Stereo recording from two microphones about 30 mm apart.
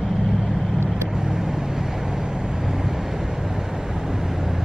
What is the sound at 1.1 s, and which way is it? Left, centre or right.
Vehicle, right.